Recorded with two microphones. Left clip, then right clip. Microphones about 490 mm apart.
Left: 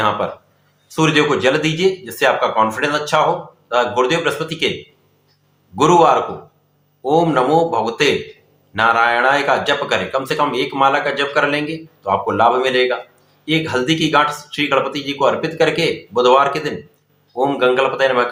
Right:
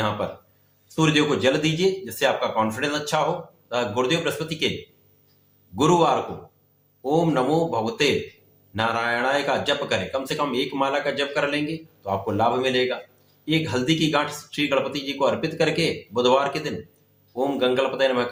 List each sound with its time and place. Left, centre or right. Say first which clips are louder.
0.9 s a man's voice: left 6 dB; right
5.7 s a man's voice: left 8 dB; right